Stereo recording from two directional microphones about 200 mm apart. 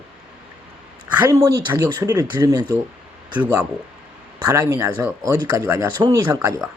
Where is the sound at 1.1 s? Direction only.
15° right (ahead or behind).